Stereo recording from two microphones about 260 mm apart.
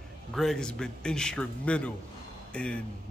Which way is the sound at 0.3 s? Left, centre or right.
Centre.